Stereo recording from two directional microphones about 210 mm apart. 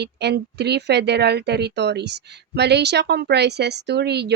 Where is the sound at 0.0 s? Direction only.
50° right (ahead or behind).